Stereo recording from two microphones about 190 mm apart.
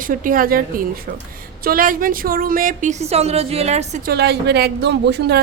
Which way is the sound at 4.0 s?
55° right (ahead or behind).